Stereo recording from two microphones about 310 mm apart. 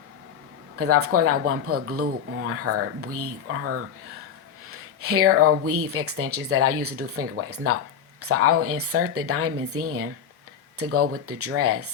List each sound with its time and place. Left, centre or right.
0.8 s speech: right